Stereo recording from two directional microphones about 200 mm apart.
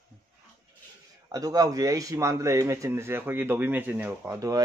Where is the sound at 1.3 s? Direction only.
15° right (ahead or behind).